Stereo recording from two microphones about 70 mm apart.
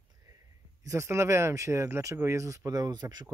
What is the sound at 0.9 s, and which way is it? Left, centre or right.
Speech, right.